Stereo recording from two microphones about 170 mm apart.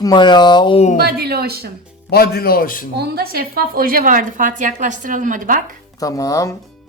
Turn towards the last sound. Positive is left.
turn(degrees=20)  # may be behind; listen again after turning